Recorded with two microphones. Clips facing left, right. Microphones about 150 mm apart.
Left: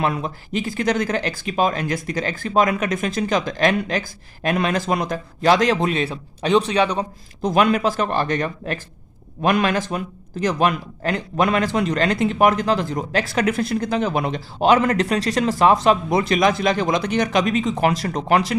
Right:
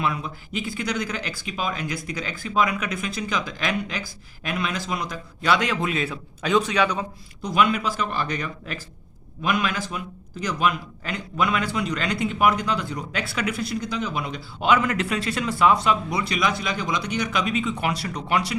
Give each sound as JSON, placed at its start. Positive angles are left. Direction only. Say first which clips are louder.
{"t": 0.0, "sound": "a man's voice", "louder": "left 4 dB", "side_deg": 45}
{"t": 7.4, "sound": "a man's voice", "louder": "left 5 dB", "side_deg": 50}